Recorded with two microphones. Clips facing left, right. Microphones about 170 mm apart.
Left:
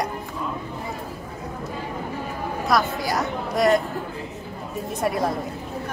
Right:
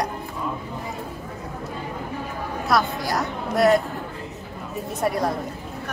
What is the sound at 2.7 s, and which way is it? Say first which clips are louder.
A woman's voice: even; centre (ahead or behind).